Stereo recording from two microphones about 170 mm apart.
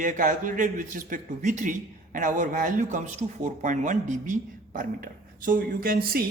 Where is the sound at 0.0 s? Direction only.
50° right (ahead or behind).